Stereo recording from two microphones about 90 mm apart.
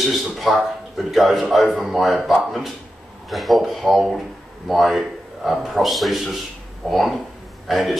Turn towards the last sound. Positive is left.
turn(degrees=0)  # may be behind; listen again after turning